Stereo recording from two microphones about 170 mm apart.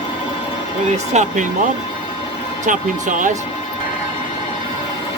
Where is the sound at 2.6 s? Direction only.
50° right (ahead or behind).